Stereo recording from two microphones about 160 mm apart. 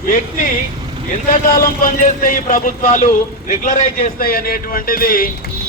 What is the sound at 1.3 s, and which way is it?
Speech, 60° left (ahead or behind).